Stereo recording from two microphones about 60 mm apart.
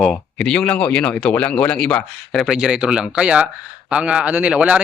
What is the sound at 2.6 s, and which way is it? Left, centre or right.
Speech, centre.